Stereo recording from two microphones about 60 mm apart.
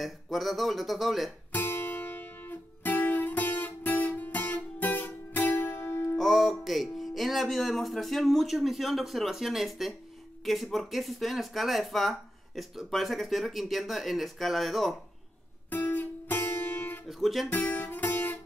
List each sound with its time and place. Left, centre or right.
0.0 s speech: centre
1.5 s music: left
6.1 s speech: centre
15.7 s music: left
17.0 s speech: centre
17.5 s music: left